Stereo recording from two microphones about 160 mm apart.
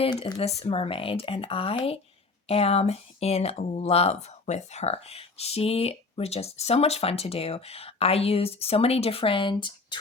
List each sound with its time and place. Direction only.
0.0 s speech: 35° left (ahead or behind)